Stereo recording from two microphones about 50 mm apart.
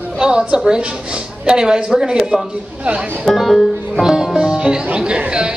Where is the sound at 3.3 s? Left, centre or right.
Centre.